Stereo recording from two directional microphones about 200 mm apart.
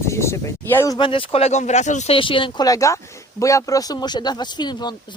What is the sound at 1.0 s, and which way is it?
Speech, 25° left (ahead or behind).